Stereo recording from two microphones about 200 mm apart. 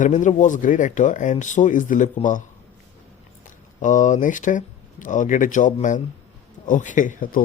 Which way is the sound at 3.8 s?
40° left (ahead or behind).